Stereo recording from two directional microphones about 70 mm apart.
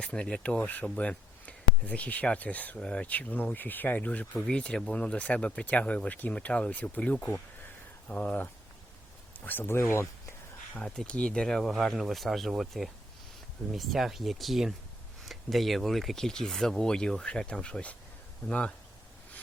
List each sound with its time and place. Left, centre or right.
0.0 s speech: centre; by 10.1 s left
10.8 s speech: centre